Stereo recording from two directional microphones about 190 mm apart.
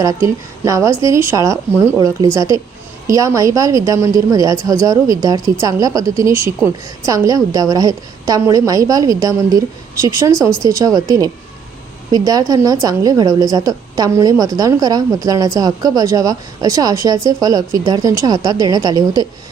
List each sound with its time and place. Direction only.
0.0 s a woman's voice: 15° right (ahead or behind)
12.1 s a woman's voice: 20° right (ahead or behind)